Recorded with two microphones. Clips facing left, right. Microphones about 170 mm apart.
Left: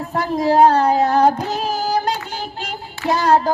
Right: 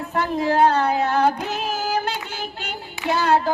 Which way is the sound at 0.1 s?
40° left (ahead or behind).